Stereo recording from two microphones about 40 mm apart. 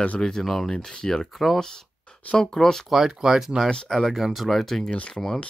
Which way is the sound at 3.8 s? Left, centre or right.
Centre.